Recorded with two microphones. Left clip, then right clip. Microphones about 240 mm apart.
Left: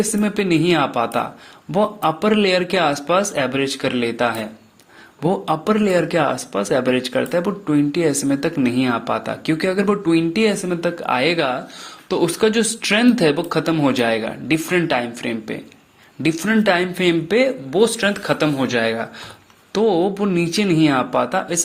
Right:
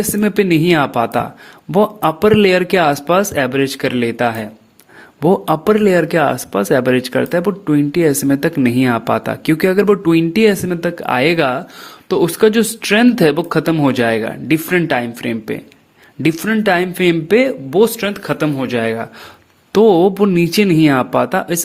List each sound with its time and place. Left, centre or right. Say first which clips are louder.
0.0 s speech: right 5 dB; right